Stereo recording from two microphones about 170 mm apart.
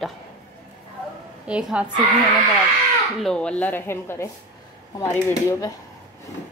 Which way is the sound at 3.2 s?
5° left (ahead or behind).